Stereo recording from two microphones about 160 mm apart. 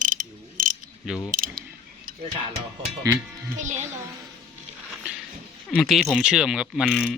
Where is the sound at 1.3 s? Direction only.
60° right (ahead or behind).